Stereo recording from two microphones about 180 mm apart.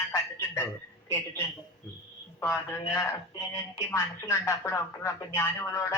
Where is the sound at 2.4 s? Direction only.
15° left (ahead or behind).